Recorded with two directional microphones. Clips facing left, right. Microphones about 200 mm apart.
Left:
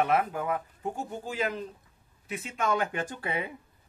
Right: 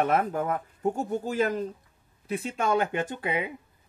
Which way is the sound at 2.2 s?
35° right (ahead or behind).